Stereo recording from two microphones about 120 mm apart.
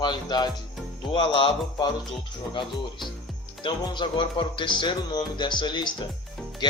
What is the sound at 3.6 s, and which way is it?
Speech, 40° left (ahead or behind).